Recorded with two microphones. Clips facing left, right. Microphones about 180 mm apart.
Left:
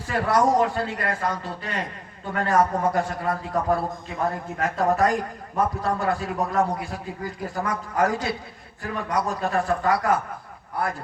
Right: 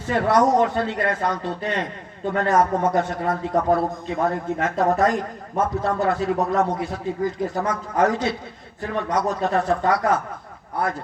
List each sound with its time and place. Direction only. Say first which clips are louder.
0.0 s a man's voice: right 3 dB; 25° right (ahead or behind)